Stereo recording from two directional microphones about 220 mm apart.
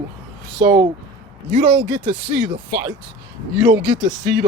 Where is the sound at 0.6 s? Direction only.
20° right (ahead or behind).